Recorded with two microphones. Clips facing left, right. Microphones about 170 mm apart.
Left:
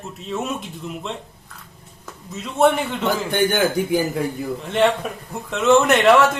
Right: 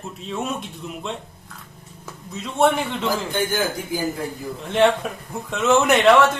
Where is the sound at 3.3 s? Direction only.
65° left (ahead or behind).